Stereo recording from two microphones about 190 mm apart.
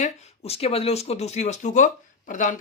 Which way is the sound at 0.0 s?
35° left (ahead or behind).